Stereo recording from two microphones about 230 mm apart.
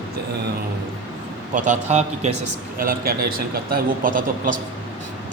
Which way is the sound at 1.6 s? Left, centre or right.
Right.